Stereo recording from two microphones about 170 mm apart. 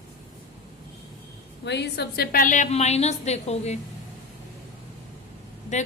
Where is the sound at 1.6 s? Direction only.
80° left; by 3.8 s 40° left (ahead or behind).